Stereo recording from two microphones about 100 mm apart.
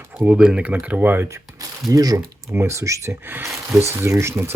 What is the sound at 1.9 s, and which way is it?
Speech, 35° right (ahead or behind).